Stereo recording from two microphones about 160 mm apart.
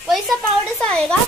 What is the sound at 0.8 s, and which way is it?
Speech, 5° left (ahead or behind).